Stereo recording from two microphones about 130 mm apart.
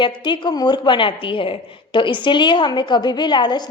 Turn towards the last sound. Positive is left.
turn(degrees=35)  # may be behind; listen again after turning